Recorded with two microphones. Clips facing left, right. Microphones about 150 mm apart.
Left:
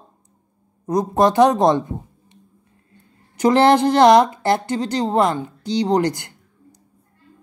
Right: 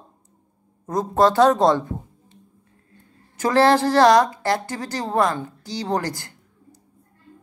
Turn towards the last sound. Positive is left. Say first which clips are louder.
# left 1 dB
turn(degrees=20)  # may be behind; listen again after turning